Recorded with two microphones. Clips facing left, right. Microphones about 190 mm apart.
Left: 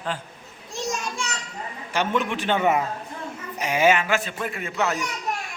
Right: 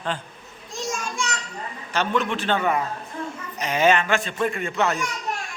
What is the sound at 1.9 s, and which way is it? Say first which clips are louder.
Speech: right 1 dB; 15° left (ahead or behind).